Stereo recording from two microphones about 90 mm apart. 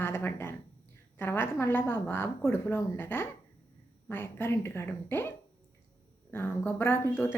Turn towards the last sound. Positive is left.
turn(degrees=25)  # may be behind; listen again after turning